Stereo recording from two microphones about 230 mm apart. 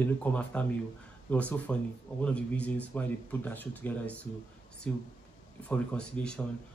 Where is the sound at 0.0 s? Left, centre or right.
Centre.